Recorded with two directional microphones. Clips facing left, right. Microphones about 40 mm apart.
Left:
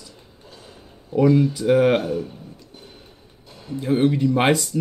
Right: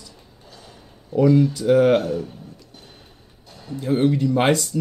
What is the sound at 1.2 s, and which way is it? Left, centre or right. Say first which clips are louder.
Speech: right 1 dB; centre.